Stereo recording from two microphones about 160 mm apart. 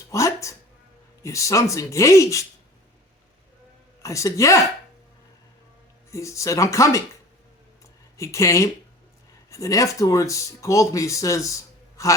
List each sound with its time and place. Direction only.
0.1 s speech: 20° left (ahead or behind)
4.0 s speech: 20° left (ahead or behind)
6.1 s speech: 20° left (ahead or behind)
8.2 s speech: 20° left (ahead or behind)